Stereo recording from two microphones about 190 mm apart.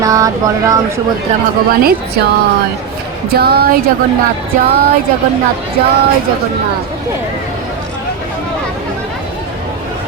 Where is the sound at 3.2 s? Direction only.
55° right (ahead or behind).